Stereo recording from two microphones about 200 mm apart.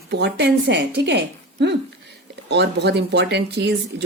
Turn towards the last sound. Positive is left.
turn(degrees=-55)  # may be behind; listen again after turning